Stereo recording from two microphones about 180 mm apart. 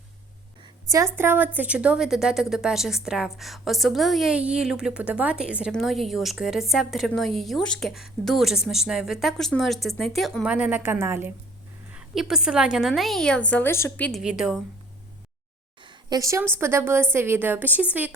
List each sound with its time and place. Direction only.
0.9 s a woman's voice: 15° right (ahead or behind)
15.8 s a sound: 25° right (ahead or behind)
16.6 s a woman's voice: 15° right (ahead or behind)